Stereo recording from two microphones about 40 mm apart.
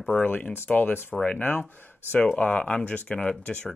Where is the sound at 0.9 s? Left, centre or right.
Left.